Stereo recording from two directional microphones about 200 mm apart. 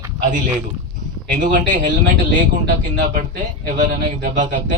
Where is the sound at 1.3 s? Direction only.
40° right (ahead or behind).